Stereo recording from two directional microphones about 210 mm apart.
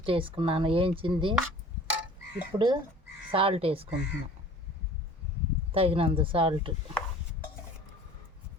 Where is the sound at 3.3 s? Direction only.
25° right (ahead or behind).